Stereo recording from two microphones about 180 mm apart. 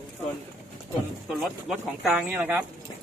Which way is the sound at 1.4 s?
Centre (ahead or behind).